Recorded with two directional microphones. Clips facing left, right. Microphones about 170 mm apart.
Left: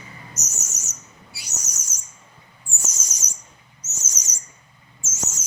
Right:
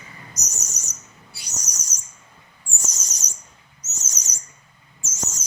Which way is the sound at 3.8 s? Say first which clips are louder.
Even; 10° left (ahead or behind).